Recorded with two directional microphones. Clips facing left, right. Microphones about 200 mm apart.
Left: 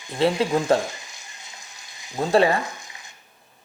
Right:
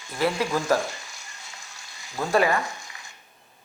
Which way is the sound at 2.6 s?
20° left (ahead or behind).